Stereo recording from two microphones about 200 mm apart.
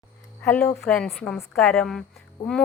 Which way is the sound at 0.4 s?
5° left (ahead or behind).